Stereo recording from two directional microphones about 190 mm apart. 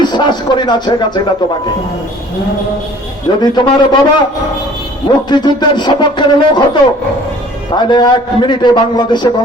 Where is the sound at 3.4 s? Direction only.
20° left (ahead or behind).